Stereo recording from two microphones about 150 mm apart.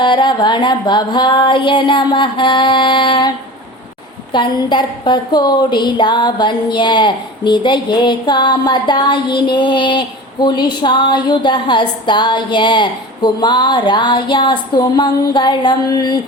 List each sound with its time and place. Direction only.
0.0 s speech: 30° left (ahead or behind)